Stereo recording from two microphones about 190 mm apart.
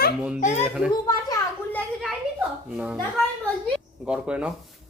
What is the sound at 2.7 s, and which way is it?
Speech, 5° right (ahead or behind).